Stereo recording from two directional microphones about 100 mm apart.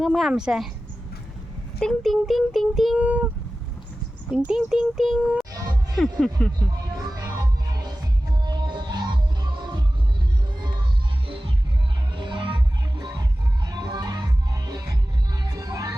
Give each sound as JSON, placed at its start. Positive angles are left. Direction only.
{"t": 0.0, "sound": "a child's voice", "side_deg": 0}
{"t": 1.8, "sound": "a child's voice", "side_deg": 0}
{"t": 3.0, "sound": "speech", "side_deg": -15}
{"t": 4.3, "sound": "a child's voice", "side_deg": -5}
{"t": 7.3, "sound": "music", "side_deg": -35}
{"t": 8.4, "sound": "music", "side_deg": -45}
{"t": 12.1, "sound": "music", "side_deg": -55}
{"t": 13.7, "sound": "music", "side_deg": -45}